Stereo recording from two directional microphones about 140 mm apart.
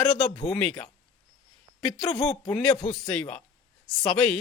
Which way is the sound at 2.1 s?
45° left (ahead or behind).